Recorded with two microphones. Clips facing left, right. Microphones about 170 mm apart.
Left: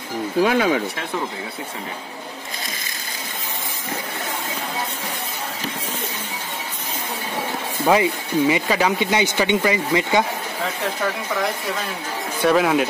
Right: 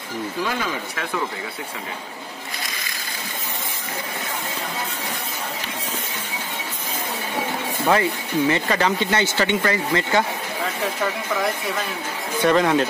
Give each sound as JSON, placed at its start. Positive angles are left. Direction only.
{"t": 0.4, "sound": "speech", "side_deg": 70}
{"t": 7.8, "sound": "speech", "side_deg": 10}
{"t": 12.4, "sound": "speech", "side_deg": 5}